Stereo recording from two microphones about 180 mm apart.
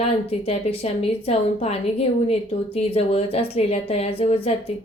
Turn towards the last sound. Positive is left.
turn(degrees=35)  # may be behind; listen again after turning